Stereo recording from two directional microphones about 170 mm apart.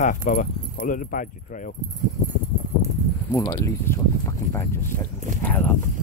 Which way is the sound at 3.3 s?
20° left (ahead or behind).